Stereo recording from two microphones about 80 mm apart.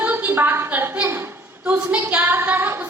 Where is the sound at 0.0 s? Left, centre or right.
Right.